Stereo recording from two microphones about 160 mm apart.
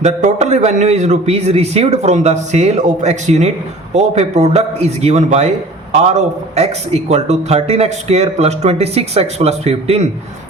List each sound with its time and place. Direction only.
0.0 s a man's voice: 45° right (ahead or behind)